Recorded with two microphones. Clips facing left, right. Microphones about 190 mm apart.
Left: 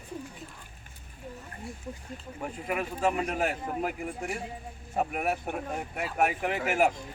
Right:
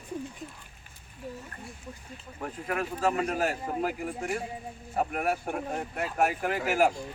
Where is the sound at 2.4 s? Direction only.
10° left (ahead or behind).